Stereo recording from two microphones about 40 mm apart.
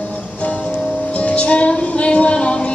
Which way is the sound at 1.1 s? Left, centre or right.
Left.